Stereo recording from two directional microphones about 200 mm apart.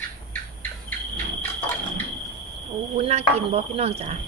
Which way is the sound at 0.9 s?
10° left (ahead or behind).